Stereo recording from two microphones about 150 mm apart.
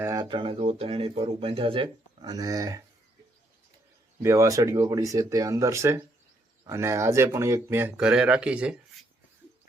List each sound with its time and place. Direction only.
0.0 s speech: 25° right (ahead or behind)
4.2 s speech: 20° right (ahead or behind)